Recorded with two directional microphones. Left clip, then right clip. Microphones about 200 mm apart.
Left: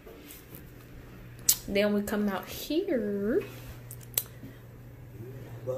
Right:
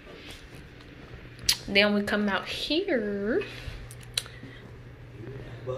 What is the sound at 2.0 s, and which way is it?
Speech, 20° left (ahead or behind).